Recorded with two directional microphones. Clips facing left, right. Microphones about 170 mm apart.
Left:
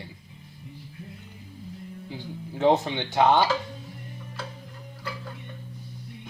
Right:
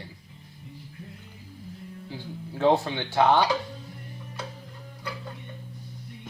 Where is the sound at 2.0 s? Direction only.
15° left (ahead or behind).